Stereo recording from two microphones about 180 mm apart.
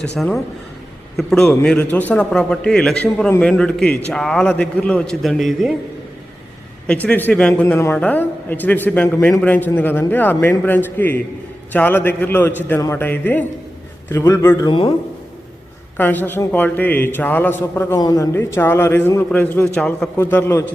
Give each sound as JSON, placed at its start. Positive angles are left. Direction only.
{"t": 0.2, "sound": "a man's voice", "side_deg": 0}
{"t": 6.8, "sound": "a man's voice", "side_deg": 5}
{"t": 16.0, "sound": "a man's voice", "side_deg": 10}